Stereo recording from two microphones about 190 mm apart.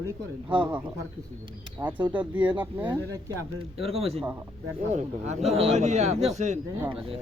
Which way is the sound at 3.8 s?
30° right (ahead or behind).